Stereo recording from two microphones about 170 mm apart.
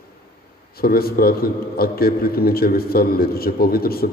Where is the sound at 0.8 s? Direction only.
65° left (ahead or behind).